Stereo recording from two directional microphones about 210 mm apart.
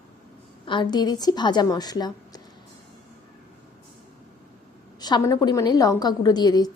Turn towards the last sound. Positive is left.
turn(degrees=20)  # may be behind; listen again after turning